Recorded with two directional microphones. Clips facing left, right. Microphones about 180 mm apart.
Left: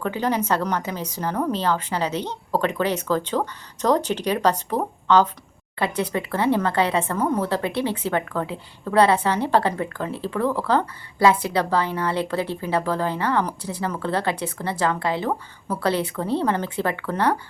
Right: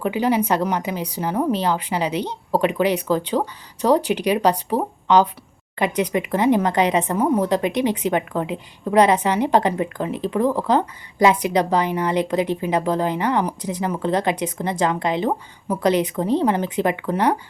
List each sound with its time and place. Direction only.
0.0 s a woman's voice: 10° right (ahead or behind)